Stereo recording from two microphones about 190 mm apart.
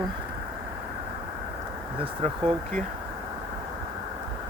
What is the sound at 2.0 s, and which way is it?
Speech, 30° right (ahead or behind).